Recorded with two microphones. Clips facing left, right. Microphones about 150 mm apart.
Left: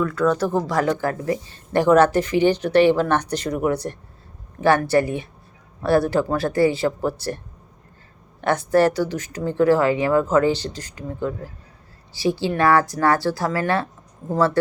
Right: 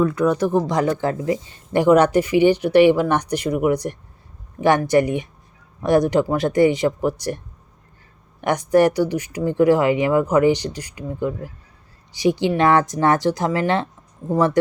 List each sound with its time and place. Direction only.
0.0 s speech: 20° right (ahead or behind)